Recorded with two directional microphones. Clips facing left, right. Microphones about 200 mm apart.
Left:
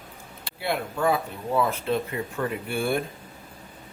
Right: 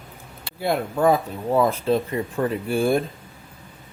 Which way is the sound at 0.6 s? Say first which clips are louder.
Right 5 dB; 40° right (ahead or behind).